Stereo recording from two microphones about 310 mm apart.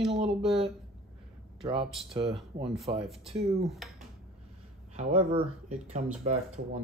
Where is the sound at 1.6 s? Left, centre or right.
Centre.